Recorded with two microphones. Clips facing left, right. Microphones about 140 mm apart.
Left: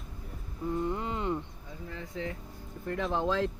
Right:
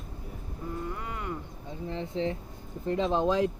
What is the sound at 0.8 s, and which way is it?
Wild animals, 25° left (ahead or behind).